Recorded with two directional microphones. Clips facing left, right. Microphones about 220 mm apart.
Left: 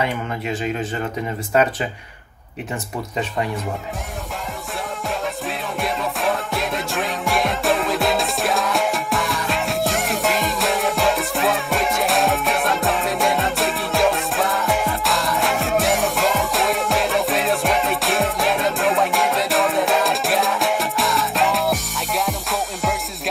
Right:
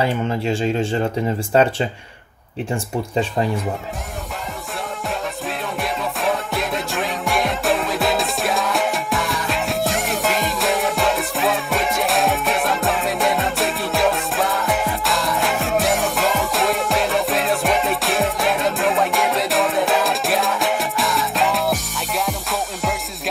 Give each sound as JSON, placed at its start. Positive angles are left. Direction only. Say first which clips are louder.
{"t": 0.0, "sound": "speech", "louder": "right 4 dB", "side_deg": -30}
{"t": 5.8, "sound": "music", "louder": "left 2 dB", "side_deg": 0}